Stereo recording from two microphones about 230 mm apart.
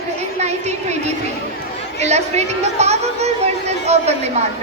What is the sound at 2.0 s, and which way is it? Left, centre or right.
Speech, right.